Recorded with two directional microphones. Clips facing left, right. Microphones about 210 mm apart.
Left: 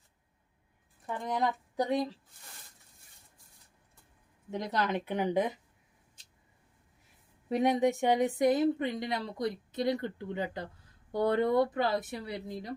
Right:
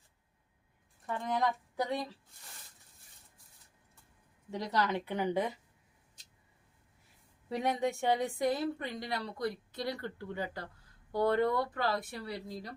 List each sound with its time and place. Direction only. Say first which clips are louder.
1.0 s speech: left 1 dB; 15° left (ahead or behind)
4.5 s speech: left 1 dB; 20° left (ahead or behind)
7.5 s speech: left 6 dB; 20° left (ahead or behind)